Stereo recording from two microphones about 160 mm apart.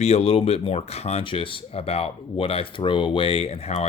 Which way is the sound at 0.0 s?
40° left (ahead or behind).